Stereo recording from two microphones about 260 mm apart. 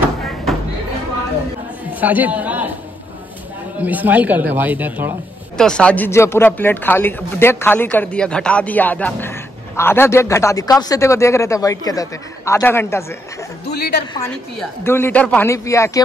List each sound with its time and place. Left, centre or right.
1.9 s chatter: centre
3.8 s speech: centre
13.7 s a woman's voice: left
14.1 s speech: centre